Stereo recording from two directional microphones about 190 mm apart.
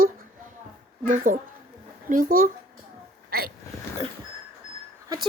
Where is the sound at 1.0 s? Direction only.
40° right (ahead or behind).